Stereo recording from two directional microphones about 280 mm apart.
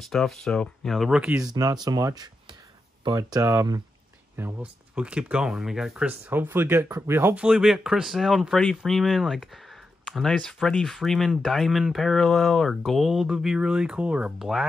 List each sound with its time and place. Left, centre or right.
0.0 s speech: centre
1.5 s speech: centre